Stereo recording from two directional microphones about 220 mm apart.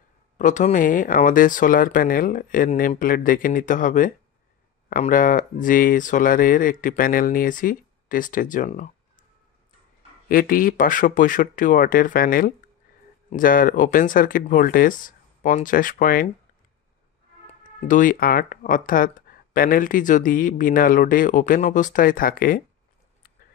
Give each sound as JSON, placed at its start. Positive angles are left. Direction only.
{"t": 0.4, "sound": "speech", "side_deg": 35}
{"t": 10.2, "sound": "speech", "side_deg": 40}
{"t": 17.5, "sound": "speech", "side_deg": 30}